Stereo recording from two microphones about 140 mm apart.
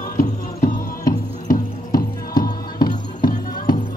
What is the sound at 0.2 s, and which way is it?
Music, 70° left (ahead or behind).